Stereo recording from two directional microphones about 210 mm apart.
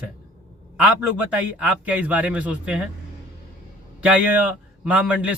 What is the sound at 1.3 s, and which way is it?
A man's voice, 5° right (ahead or behind).